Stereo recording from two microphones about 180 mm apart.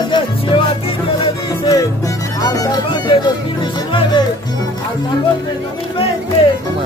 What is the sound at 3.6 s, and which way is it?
Music, 25° left (ahead or behind).